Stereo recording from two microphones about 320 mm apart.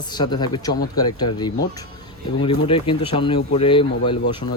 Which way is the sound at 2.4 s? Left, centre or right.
Centre.